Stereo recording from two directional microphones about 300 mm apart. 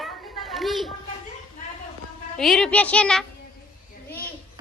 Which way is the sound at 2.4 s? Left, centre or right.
Centre.